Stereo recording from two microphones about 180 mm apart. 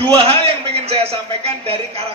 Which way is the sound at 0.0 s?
35° right (ahead or behind).